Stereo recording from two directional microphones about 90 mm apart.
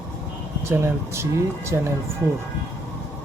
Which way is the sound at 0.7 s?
30° right (ahead or behind).